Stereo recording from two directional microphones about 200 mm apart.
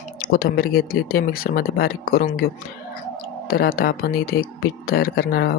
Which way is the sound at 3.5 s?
50° left (ahead or behind).